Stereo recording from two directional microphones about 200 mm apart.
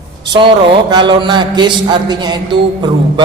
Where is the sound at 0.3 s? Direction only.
25° right (ahead or behind).